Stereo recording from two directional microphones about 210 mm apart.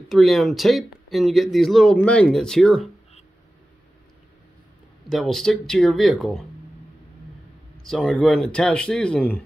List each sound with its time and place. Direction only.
0.1 s speech: centre (ahead or behind)
5.1 s speech: centre (ahead or behind)
7.8 s speech: centre (ahead or behind)